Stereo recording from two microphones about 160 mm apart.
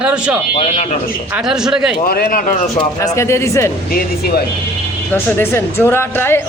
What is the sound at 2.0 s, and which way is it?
Speech, 70° left (ahead or behind).